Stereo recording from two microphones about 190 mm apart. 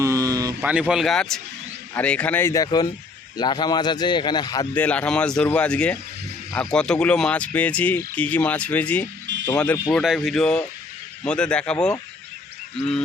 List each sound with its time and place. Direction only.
0.0 s a sound: 20° right (ahead or behind)
0.6 s speech: 5° right (ahead or behind); by 4.7 s 20° left (ahead or behind)
4.7 s speech: 5° left (ahead or behind)